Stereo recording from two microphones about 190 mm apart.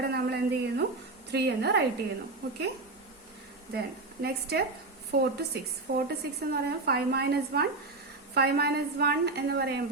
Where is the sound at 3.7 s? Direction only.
55° right (ahead or behind).